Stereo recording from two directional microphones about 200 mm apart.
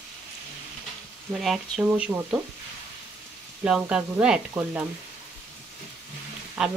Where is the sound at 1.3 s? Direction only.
Centre (ahead or behind).